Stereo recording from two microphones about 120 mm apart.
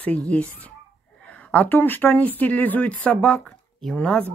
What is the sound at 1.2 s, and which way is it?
Speech, 10° left (ahead or behind).